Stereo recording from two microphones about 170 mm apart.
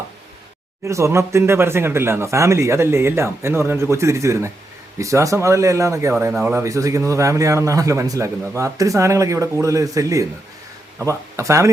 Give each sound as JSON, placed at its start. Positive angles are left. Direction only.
{"t": 0.9, "sound": "a man's voice", "side_deg": -15}